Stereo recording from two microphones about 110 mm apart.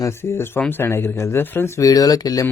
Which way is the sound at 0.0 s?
20° left (ahead or behind).